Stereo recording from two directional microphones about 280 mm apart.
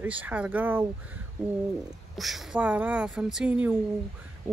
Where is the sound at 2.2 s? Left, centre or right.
Centre.